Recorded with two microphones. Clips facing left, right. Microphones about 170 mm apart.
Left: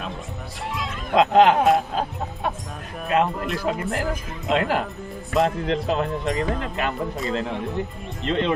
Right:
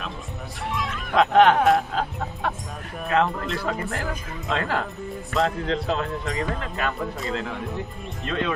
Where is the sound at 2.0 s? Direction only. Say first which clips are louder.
Left 1 dB; 15° left (ahead or behind).